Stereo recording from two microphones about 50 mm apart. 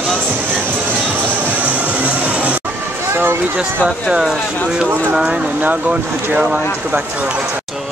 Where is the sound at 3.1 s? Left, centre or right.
Right.